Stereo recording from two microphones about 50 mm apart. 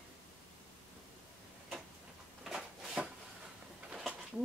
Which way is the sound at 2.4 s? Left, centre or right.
Centre.